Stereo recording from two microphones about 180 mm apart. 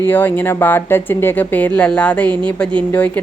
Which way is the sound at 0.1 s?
10° left (ahead or behind).